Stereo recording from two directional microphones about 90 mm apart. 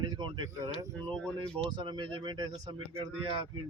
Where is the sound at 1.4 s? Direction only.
65° right (ahead or behind).